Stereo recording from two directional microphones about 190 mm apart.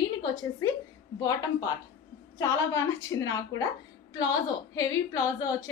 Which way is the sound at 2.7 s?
15° left (ahead or behind).